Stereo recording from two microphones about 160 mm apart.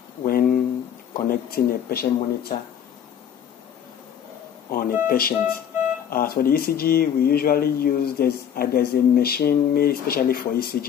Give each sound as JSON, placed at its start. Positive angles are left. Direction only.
{"t": 0.2, "sound": "a sound", "side_deg": 60}
{"t": 1.3, "sound": "speech", "side_deg": 70}
{"t": 4.6, "sound": "speech", "side_deg": 65}